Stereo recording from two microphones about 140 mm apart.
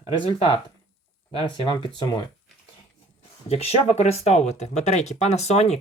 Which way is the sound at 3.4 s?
45° left (ahead or behind).